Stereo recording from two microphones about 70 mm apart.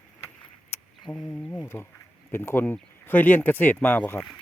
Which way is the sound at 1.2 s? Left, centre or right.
Centre.